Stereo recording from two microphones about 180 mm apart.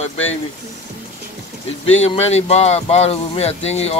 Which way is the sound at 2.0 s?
35° left (ahead or behind).